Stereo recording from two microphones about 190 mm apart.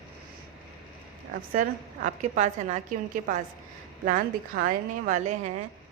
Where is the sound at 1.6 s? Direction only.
40° right (ahead or behind).